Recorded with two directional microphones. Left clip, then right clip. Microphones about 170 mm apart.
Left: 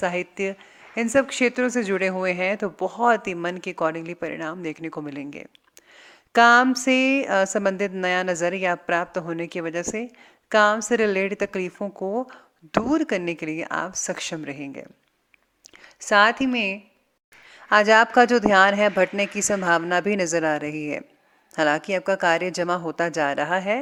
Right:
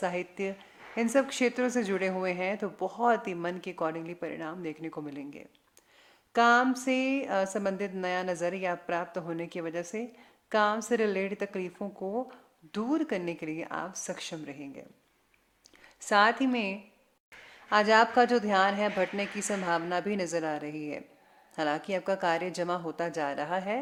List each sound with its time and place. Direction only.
0.0 s speech: 25° left (ahead or behind)
6.0 s a sound: 40° left (ahead or behind)
6.7 s a woman's voice: 35° left (ahead or behind)
15.8 s a woman's voice: 25° left (ahead or behind)